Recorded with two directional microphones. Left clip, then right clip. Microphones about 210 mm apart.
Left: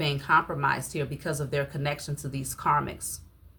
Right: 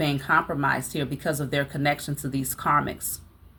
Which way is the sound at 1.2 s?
5° left (ahead or behind).